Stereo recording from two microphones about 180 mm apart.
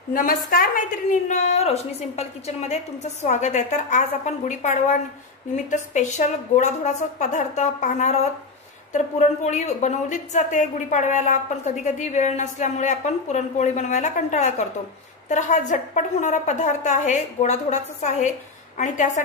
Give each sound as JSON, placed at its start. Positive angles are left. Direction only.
{"t": 0.1, "sound": "a woman's voice", "side_deg": 50}
{"t": 1.3, "sound": "a woman's voice", "side_deg": 40}